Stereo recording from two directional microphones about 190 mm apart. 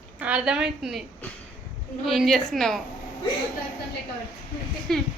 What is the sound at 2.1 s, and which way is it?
Speech, centre (ahead or behind).